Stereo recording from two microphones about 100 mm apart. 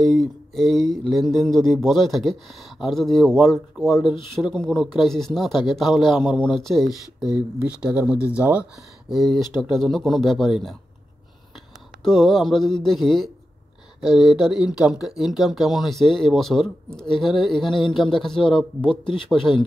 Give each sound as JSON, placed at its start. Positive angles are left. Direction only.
{"t": 0.0, "sound": "a sound", "side_deg": 0}
{"t": 1.1, "sound": "speech", "side_deg": 0}
{"t": 9.1, "sound": "speech", "side_deg": 0}
{"t": 12.0, "sound": "speech", "side_deg": 5}
{"t": 18.8, "sound": "speech", "side_deg": 60}